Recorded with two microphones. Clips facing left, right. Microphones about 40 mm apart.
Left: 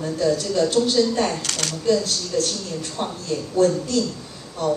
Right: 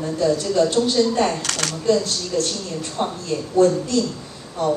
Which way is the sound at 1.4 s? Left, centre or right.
Right.